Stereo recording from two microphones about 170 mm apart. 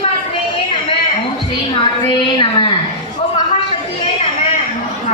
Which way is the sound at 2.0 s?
30° left (ahead or behind).